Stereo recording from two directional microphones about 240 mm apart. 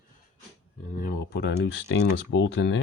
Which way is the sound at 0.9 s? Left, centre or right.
Left.